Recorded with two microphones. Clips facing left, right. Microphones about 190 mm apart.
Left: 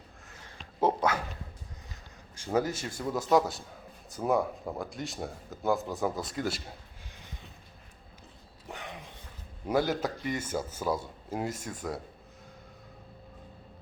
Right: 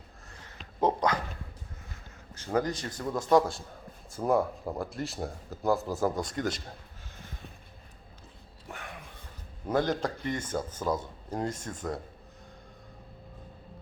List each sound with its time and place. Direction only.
0.8 s dog: 5° left (ahead or behind)
2.3 s speech: 10° left (ahead or behind)
8.6 s a sound: 20° left (ahead or behind)
9.6 s speech: 10° left (ahead or behind)